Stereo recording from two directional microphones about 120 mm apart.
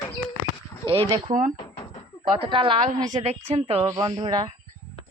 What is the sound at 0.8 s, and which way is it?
Speech, 30° left (ahead or behind).